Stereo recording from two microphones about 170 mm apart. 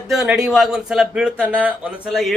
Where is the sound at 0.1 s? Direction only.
Centre (ahead or behind).